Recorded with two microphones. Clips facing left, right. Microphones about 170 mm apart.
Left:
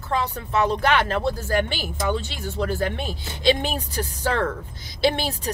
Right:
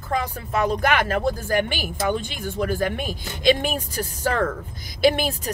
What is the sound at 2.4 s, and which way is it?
Speech, 50° right (ahead or behind).